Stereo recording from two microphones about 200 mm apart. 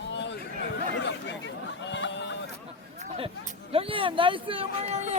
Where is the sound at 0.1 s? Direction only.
65° left (ahead or behind).